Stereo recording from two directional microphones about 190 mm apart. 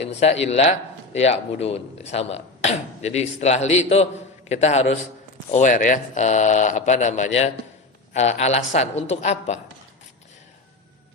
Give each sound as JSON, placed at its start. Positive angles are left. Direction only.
{"t": 0.2, "sound": "speech", "side_deg": 35}